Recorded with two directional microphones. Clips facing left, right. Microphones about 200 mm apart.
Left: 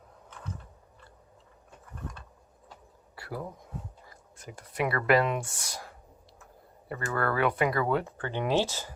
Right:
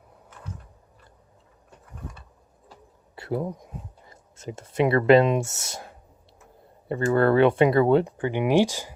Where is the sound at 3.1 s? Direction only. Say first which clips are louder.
Right 9 dB; 25° right (ahead or behind).